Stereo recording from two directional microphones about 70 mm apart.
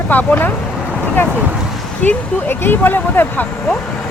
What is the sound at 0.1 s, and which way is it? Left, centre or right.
Speech, left.